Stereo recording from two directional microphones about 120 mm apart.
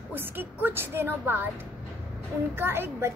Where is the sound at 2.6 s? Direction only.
20° right (ahead or behind).